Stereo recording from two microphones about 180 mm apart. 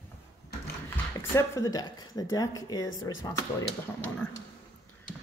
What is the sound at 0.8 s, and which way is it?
Speech, 15° left (ahead or behind).